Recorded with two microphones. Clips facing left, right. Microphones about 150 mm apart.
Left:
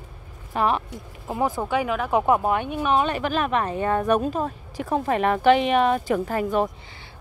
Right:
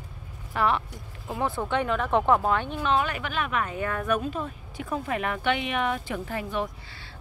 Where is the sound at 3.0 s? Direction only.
35° left (ahead or behind).